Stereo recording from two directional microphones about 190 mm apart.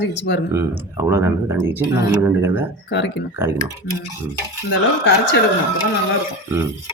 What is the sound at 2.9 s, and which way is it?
Speech, 70° left (ahead or behind).